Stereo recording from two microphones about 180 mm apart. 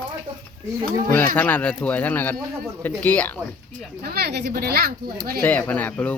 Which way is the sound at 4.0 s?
60° right (ahead or behind).